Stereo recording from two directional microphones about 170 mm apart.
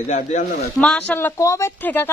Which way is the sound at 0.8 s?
5° left (ahead or behind).